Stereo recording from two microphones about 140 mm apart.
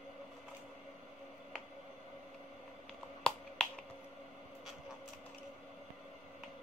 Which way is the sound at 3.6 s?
5° left (ahead or behind).